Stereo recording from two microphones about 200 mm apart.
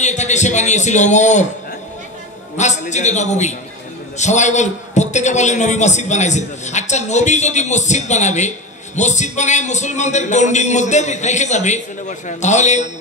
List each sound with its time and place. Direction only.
0.0 s a man's voice: 35° left (ahead or behind)
2.5 s a man's voice: 35° left (ahead or behind)